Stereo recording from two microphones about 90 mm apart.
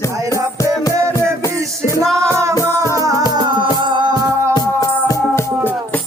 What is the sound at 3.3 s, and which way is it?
Music, 60° right (ahead or behind).